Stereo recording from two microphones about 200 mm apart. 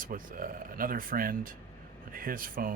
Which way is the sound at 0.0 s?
45° right (ahead or behind).